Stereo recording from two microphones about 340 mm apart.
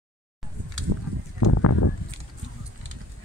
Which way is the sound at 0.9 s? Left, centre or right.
Right.